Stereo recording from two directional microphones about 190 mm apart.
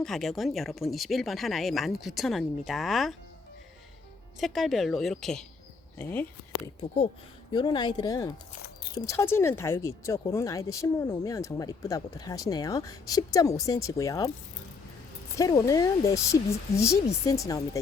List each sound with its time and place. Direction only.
0.0 s speech: centre (ahead or behind)
4.4 s speech: centre (ahead or behind)
7.5 s speech: 25° left (ahead or behind)
15.4 s speech: 20° left (ahead or behind)